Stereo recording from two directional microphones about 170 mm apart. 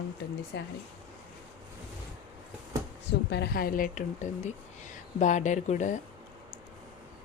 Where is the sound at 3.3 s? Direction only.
70° left (ahead or behind); by 5.9 s 45° left (ahead or behind).